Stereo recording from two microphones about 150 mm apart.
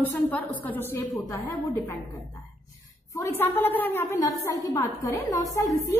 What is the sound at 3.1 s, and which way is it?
A woman's voice, 15° left (ahead or behind).